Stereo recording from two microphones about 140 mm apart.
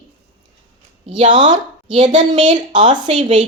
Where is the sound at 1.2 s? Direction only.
60° right (ahead or behind).